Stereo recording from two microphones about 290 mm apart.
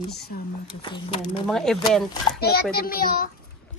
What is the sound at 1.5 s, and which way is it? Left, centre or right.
Speech, centre.